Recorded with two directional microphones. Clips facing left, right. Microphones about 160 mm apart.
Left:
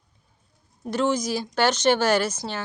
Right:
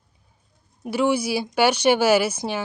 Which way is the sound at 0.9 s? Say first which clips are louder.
Right 2 dB; 10° right (ahead or behind).